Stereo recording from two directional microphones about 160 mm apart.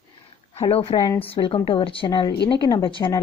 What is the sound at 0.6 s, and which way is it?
A woman's voice, 35° left (ahead or behind).